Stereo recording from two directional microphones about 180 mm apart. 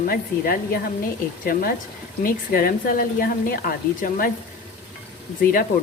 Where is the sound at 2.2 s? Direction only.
50° left (ahead or behind).